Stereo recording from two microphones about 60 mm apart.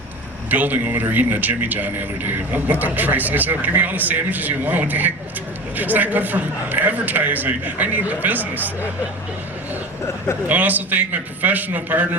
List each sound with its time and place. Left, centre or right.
0.5 s speech: right
10.4 s speech: right